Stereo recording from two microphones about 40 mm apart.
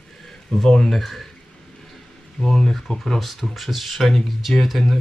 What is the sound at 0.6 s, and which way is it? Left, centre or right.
Speech, centre.